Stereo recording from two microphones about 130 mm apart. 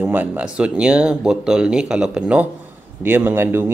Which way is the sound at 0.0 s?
10° right (ahead or behind).